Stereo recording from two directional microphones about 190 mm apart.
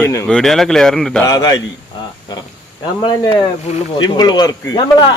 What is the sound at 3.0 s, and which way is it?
Speech, 20° left (ahead or behind).